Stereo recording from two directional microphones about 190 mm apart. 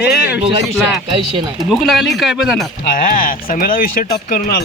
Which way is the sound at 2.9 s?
45° left (ahead or behind).